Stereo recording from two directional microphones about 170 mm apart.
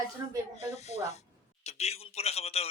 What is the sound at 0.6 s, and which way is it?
A man's voice, 40° left (ahead or behind).